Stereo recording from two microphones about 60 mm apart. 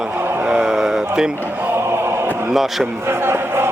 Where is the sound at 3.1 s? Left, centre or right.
Right.